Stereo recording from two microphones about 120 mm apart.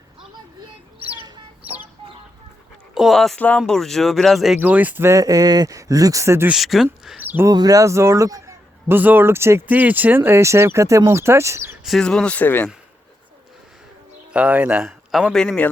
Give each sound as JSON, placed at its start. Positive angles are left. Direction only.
{"t": 0.9, "sound": "chicken", "side_deg": -50}
{"t": 2.9, "sound": "speech", "side_deg": 0}
{"t": 3.3, "sound": "speech", "side_deg": 10}
{"t": 4.6, "sound": "a man's voice", "side_deg": -15}
{"t": 6.5, "sound": "speech", "side_deg": 0}
{"t": 7.2, "sound": "a sound", "side_deg": -15}
{"t": 7.4, "sound": "a man's voice", "side_deg": -30}
{"t": 11.8, "sound": "speech", "side_deg": 0}
{"t": 14.3, "sound": "speech", "side_deg": -10}
{"t": 14.8, "sound": "a man's voice", "side_deg": 0}